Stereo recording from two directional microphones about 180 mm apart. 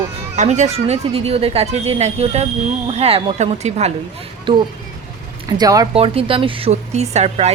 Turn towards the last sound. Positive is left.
turn(degrees=-35)  # may be behind; listen again after turning